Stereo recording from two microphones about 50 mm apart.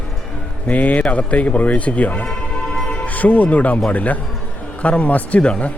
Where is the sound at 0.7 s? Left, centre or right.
Left.